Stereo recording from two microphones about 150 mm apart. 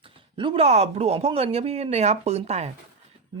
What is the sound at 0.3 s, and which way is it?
Speech, 35° right (ahead or behind).